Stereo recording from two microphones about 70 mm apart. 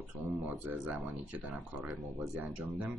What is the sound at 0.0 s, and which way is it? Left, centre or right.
Speech, right.